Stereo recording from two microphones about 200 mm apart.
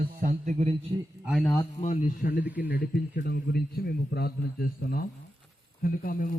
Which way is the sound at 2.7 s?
50° left (ahead or behind).